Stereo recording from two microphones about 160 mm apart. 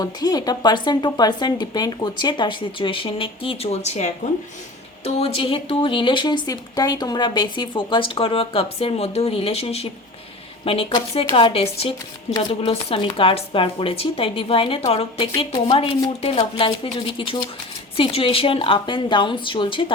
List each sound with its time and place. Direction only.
0.0 s speech: 25° left (ahead or behind)